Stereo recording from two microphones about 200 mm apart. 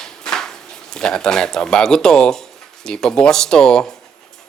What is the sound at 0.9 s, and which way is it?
Speech, 5° left (ahead or behind).